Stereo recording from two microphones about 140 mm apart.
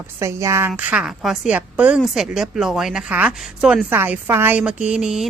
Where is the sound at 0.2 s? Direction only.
20° right (ahead or behind).